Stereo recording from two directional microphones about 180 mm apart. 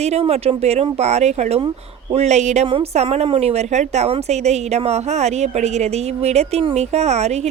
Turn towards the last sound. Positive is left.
turn(degrees=-40)  # may be behind; listen again after turning